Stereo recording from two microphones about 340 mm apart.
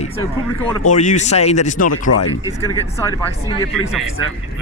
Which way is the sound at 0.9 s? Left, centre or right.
Left.